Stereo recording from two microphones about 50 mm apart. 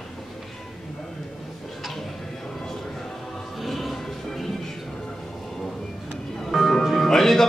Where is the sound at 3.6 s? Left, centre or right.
Centre.